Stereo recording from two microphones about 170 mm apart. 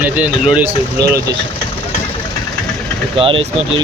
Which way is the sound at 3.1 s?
30° right (ahead or behind).